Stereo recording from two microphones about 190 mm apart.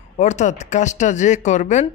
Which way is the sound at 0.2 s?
40° left (ahead or behind).